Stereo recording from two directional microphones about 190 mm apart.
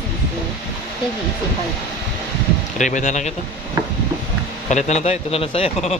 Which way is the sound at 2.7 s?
40° left (ahead or behind).